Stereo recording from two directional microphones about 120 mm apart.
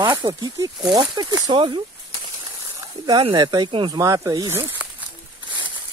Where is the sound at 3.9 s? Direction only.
30° right (ahead or behind).